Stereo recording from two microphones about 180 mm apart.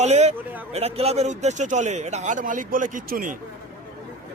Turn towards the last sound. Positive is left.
turn(degrees=-50)  # may be behind; listen again after turning